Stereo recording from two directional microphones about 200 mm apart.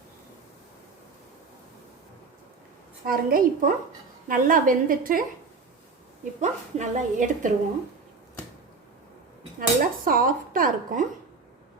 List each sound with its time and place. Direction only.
3.1 s speech: 45° right (ahead or behind)
6.4 s a woman's voice: 40° right (ahead or behind)
9.6 s speech: 45° right (ahead or behind)